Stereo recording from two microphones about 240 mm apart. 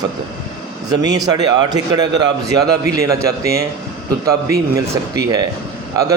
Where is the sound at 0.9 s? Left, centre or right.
Centre.